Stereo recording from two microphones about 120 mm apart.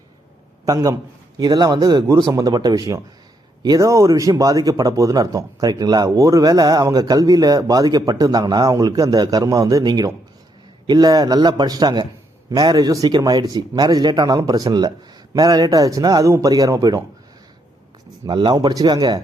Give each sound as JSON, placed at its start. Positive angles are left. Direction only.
{"t": 0.6, "sound": "a man's voice", "side_deg": -30}
{"t": 18.3, "sound": "speech", "side_deg": -40}